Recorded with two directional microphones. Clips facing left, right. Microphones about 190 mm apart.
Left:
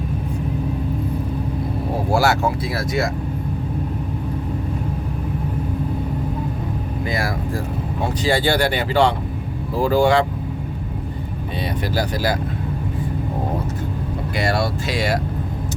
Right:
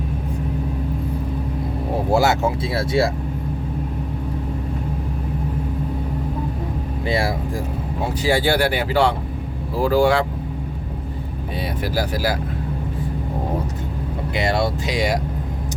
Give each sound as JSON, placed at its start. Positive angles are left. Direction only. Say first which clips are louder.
{"t": 2.0, "sound": "speech", "louder": "right 1 dB", "side_deg": -20}
{"t": 7.0, "sound": "speech", "louder": "right 3 dB", "side_deg": -30}
{"t": 8.0, "sound": "speech", "louder": "even", "side_deg": -10}
{"t": 11.6, "sound": "speech", "louder": "left 1 dB", "side_deg": -5}
{"t": 14.3, "sound": "speech", "louder": "right 1 dB", "side_deg": -20}